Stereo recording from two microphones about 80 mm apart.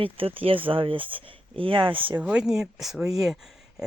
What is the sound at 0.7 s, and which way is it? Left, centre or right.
Speech, right.